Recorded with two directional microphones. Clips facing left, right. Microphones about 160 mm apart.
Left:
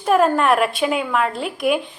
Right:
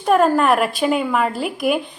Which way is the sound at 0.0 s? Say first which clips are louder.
Right 1 dB; centre (ahead or behind).